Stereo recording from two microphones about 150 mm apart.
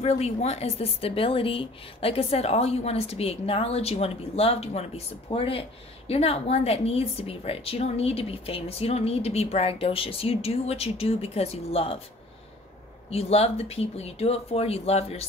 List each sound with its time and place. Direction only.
0.0 s a woman's voice: 45° left (ahead or behind)
13.1 s speech: 45° left (ahead or behind)